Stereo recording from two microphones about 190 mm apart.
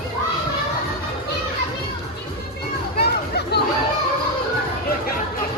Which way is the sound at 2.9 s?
60° left (ahead or behind).